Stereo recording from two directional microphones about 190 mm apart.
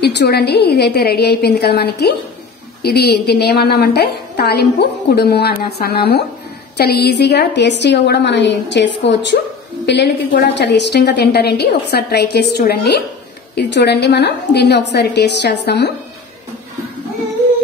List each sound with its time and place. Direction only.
0.0 s a woman's voice: 60° left (ahead or behind)